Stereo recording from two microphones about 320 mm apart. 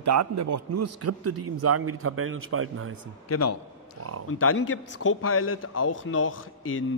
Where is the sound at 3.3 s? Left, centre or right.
Left.